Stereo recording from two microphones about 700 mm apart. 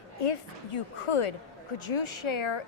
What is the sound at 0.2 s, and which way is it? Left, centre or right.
A woman's voice, left.